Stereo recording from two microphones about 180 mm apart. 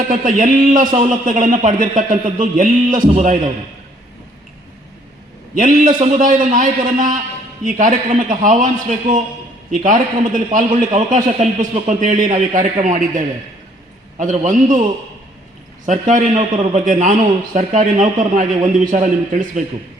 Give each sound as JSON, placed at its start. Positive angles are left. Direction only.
{"t": 0.1, "sound": "a man's voice", "side_deg": -50}
{"t": 5.5, "sound": "a man's voice", "side_deg": -50}
{"t": 14.4, "sound": "a man's voice", "side_deg": -45}
{"t": 15.9, "sound": "a man's voice", "side_deg": -45}